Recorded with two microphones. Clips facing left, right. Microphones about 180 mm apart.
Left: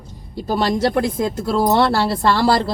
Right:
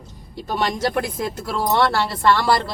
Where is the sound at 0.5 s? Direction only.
25° left (ahead or behind).